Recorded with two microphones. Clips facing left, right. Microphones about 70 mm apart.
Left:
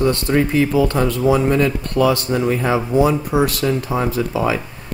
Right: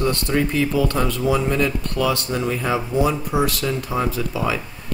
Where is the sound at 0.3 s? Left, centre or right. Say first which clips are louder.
Left 4 dB; left.